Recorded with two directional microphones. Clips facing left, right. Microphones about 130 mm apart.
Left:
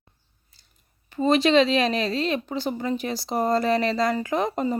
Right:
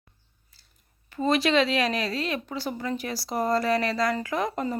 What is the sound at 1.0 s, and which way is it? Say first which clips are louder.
Speech: left 4 dB; 25° left (ahead or behind).